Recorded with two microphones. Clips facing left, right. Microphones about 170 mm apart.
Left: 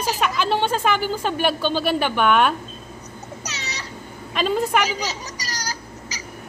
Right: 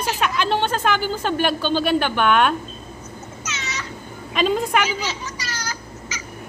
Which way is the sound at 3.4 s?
35° left (ahead or behind).